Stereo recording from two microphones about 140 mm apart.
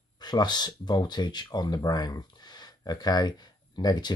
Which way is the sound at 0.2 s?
30° left (ahead or behind).